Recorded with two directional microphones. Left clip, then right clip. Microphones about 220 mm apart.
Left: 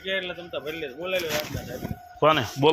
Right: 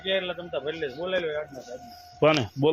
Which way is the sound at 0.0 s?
5° right (ahead or behind).